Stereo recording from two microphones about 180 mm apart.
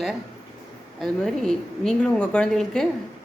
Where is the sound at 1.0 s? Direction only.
Centre (ahead or behind).